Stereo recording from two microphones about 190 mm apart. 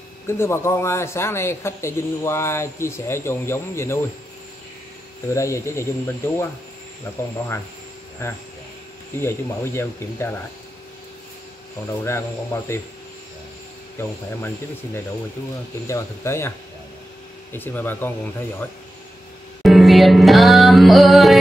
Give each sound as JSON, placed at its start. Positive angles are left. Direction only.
{"t": 0.3, "sound": "speech", "side_deg": 15}
{"t": 5.3, "sound": "speech", "side_deg": 15}
{"t": 8.2, "sound": "speech", "side_deg": 15}
{"t": 11.9, "sound": "speech", "side_deg": 15}
{"t": 15.9, "sound": "speech", "side_deg": 15}
{"t": 19.6, "sound": "music", "side_deg": 0}